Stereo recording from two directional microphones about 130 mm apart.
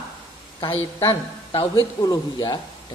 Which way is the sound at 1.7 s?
30° left (ahead or behind).